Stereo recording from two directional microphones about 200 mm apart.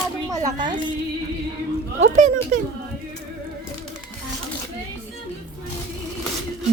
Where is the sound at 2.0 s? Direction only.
35° right (ahead or behind).